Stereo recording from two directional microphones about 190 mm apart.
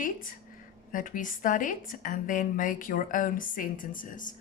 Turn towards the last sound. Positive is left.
turn(degrees=45)  # may be behind; listen again after turning